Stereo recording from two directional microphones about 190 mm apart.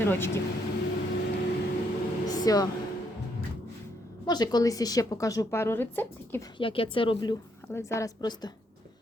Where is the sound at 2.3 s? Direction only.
20° left (ahead or behind).